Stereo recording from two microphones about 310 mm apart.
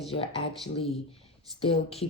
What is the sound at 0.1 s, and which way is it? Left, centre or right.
Speech, centre.